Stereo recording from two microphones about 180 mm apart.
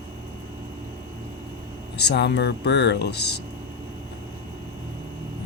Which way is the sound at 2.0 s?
70° left (ahead or behind).